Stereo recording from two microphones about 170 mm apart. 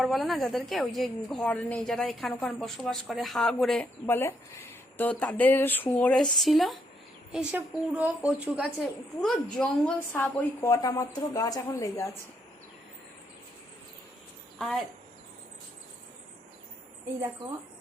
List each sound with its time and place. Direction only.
0.0 s a woman's voice: centre (ahead or behind)
10.6 s speech: 20° left (ahead or behind)
14.6 s a woman's voice: centre (ahead or behind)